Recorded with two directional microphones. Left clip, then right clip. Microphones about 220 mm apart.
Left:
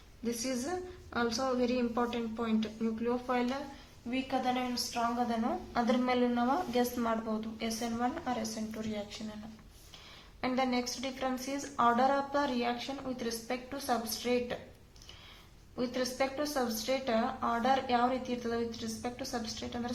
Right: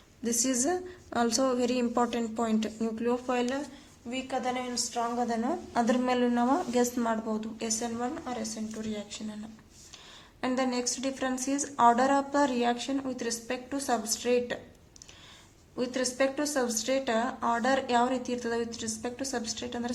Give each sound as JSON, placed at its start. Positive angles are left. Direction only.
{"t": 0.3, "sound": "a woman's voice", "side_deg": -55}
{"t": 10.4, "sound": "speech", "side_deg": -35}
{"t": 15.7, "sound": "speech", "side_deg": -35}